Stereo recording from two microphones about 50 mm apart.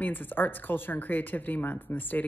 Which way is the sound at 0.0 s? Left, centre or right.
Left.